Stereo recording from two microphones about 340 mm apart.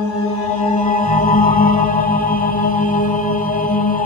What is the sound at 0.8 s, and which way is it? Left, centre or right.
Music, left.